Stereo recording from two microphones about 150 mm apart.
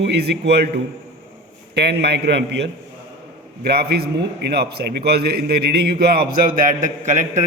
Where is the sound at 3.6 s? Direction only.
90° right; by 7.4 s 60° right (ahead or behind).